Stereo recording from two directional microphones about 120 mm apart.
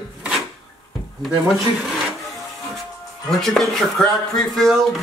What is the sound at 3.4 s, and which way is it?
Speech, centre (ahead or behind).